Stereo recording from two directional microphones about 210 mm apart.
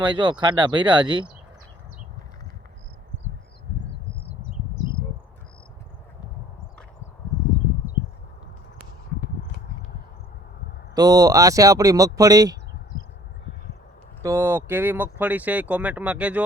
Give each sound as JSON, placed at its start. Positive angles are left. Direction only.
{"t": 0.0, "sound": "speech", "side_deg": -20}
{"t": 10.9, "sound": "speech", "side_deg": -20}
{"t": 14.2, "sound": "speech", "side_deg": -15}